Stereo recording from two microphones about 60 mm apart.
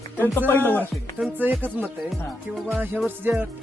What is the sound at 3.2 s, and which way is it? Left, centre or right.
Speech, right.